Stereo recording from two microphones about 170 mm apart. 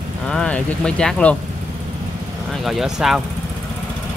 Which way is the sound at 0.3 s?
5° left (ahead or behind).